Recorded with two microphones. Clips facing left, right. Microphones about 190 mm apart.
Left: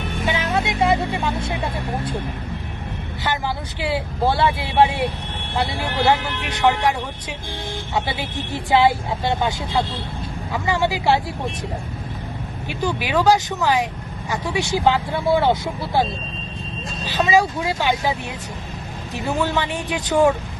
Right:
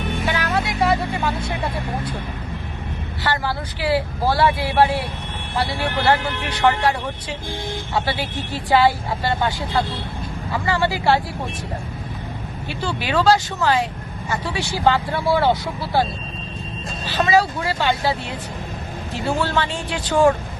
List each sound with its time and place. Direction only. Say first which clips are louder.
0.3 s music: left 2 dB; 25° left (ahead or behind)
3.2 s speech: right 1 dB; 20° left (ahead or behind)
7.9 s speech: right 1 dB; 20° left (ahead or behind)
12.6 s speech: left 2 dB; 15° left (ahead or behind)
17.2 s speech: even; 10° left (ahead or behind)